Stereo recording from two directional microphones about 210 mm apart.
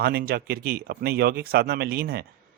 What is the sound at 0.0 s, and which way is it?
Speech, 45° right (ahead or behind).